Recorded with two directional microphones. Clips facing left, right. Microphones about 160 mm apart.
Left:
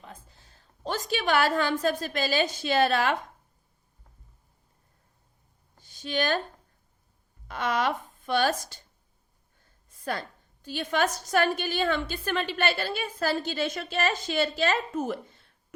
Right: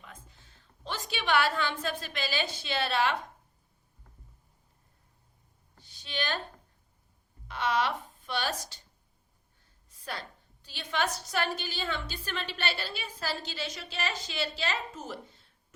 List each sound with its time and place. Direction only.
0.0 s a woman's voice: 35° left (ahead or behind)
5.8 s a woman's voice: 50° left (ahead or behind)
7.4 s speech: 45° left (ahead or behind)
9.9 s a woman's voice: 50° left (ahead or behind)